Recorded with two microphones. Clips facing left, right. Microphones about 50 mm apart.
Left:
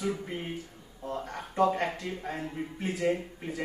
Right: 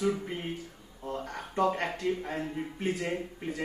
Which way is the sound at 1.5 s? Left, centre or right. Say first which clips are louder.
Left 2 dB; centre.